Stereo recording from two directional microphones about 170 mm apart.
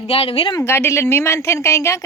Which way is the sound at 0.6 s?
15° left (ahead or behind).